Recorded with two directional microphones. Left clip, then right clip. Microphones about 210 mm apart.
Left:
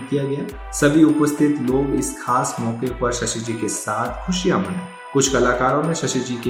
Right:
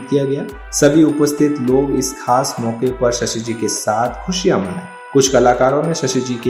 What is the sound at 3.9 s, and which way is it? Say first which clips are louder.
Speech: right 7 dB; 10° right (ahead or behind).